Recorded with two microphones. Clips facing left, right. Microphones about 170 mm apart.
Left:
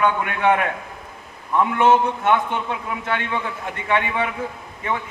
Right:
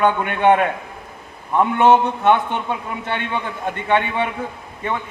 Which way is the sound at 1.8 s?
30° right (ahead or behind).